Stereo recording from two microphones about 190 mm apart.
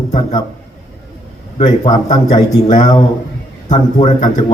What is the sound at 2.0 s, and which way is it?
A man's voice, 40° left (ahead or behind).